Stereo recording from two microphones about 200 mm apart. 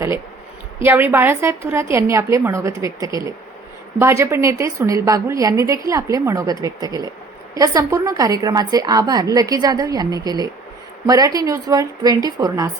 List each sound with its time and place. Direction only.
0.8 s a woman's voice: 10° right (ahead or behind)